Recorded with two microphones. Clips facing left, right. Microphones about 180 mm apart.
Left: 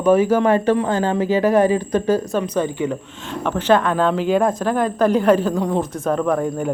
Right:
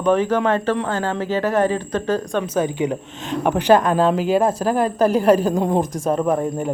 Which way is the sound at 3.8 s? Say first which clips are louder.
Right 1 dB; 35° right (ahead or behind).